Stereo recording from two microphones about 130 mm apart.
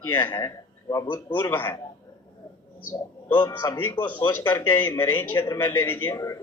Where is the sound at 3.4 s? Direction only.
25° left (ahead or behind).